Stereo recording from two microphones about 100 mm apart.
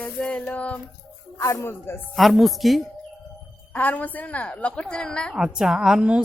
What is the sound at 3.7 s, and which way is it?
A woman's voice, 15° left (ahead or behind).